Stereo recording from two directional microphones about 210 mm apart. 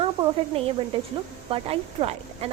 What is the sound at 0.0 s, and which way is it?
Snake, 25° right (ahead or behind).